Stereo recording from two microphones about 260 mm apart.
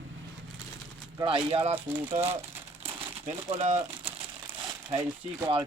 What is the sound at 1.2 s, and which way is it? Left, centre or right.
Speech, centre.